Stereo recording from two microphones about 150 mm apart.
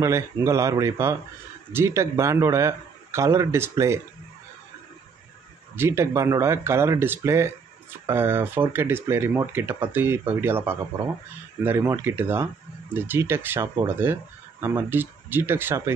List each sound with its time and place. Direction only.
0.0 s a man's voice: 20° right (ahead or behind)
5.8 s speech: 15° right (ahead or behind)